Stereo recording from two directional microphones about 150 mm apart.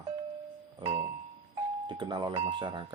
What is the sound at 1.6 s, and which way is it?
Doorbell, 30° right (ahead or behind).